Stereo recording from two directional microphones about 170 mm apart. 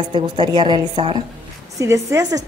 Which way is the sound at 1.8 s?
15° right (ahead or behind).